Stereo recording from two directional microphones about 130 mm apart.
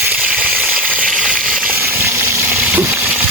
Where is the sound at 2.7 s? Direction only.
15° right (ahead or behind).